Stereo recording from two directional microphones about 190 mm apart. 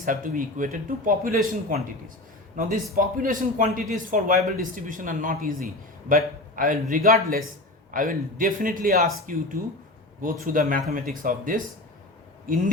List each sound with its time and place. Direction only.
0.0 s a man's voice: 45° right (ahead or behind)